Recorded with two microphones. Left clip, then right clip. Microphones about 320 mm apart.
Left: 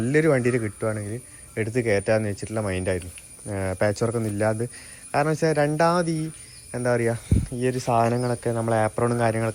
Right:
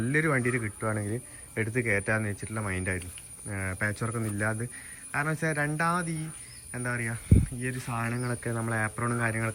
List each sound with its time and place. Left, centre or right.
0.0 s speech: centre